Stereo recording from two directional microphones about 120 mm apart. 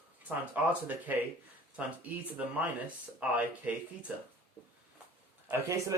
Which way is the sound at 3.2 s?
10° right (ahead or behind).